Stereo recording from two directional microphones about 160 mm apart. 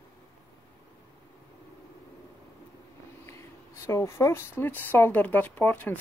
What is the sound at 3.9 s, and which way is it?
Speech, 20° left (ahead or behind).